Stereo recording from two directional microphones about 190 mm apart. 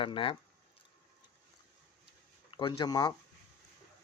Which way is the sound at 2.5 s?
25° left (ahead or behind).